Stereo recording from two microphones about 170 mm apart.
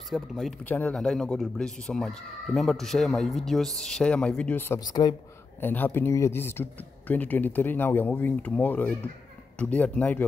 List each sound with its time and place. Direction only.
0.1 s speech: centre (ahead or behind)
4.8 s speech: 25° left (ahead or behind)
5.6 s speech: 10° left (ahead or behind)